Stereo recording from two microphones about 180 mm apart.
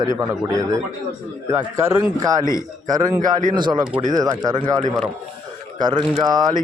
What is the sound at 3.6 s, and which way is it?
Speech, 25° right (ahead or behind).